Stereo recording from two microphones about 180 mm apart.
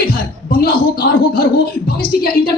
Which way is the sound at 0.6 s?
60° left (ahead or behind).